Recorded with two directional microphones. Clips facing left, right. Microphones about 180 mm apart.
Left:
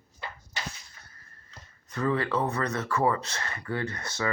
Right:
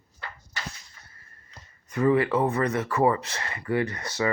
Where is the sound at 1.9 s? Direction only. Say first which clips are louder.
Right 6 dB; 15° right (ahead or behind).